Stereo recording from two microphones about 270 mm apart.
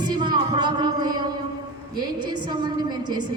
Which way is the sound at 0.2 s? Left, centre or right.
Centre.